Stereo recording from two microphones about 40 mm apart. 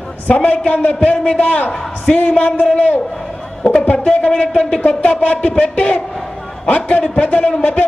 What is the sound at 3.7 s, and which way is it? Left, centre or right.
A man's voice, left.